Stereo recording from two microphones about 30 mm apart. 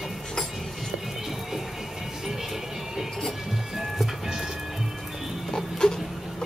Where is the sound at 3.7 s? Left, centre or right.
Centre.